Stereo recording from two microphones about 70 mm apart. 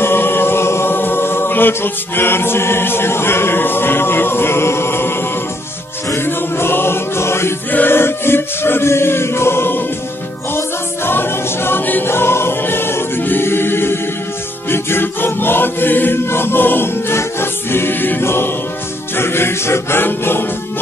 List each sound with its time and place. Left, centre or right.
0.0 s a capella: left
6.0 s music: left
7.7 s chant: left
11.1 s choir: left
14.7 s chant: left
19.1 s choir: left